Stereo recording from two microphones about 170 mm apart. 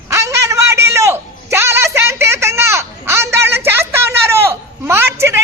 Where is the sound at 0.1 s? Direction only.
15° right (ahead or behind).